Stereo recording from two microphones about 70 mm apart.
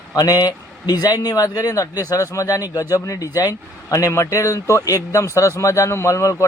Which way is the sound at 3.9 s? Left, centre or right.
Left.